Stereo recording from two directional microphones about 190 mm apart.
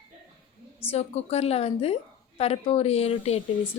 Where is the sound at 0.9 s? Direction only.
35° left (ahead or behind).